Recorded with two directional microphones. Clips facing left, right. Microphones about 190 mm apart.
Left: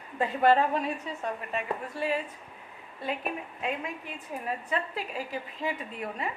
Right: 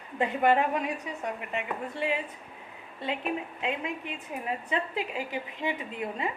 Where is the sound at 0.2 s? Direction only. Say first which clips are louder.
Left 1 dB; 20° right (ahead or behind).